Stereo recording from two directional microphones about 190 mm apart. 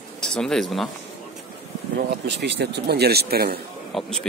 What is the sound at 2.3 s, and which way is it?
Speech, 65° right (ahead or behind).